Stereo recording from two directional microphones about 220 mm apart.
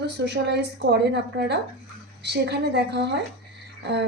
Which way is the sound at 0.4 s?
50° right (ahead or behind).